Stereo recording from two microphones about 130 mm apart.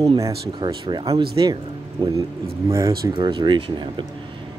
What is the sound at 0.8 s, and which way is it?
Speech, 45° right (ahead or behind).